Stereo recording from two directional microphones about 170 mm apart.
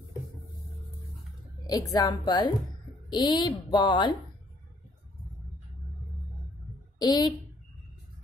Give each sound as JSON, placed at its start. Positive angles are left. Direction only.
{"t": 1.7, "sound": "speech", "side_deg": 20}
{"t": 7.0, "sound": "speech", "side_deg": 25}